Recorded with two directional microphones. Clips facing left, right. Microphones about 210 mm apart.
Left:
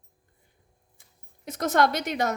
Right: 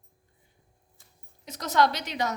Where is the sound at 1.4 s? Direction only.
50° left (ahead or behind).